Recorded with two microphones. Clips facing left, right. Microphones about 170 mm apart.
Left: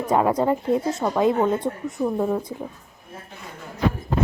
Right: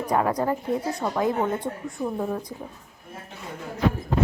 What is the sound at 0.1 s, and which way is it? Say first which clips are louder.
Speech: left 4 dB; 20° left (ahead or behind).